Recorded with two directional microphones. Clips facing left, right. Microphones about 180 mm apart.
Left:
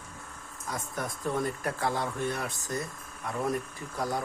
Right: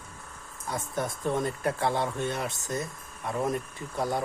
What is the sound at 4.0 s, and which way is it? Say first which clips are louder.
Speech: right 3 dB; 25° right (ahead or behind).